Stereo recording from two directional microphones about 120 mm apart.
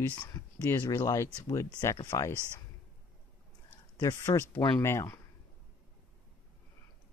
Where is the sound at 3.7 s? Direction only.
25° left (ahead or behind).